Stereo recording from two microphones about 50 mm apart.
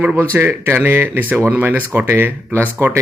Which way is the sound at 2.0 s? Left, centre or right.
Right.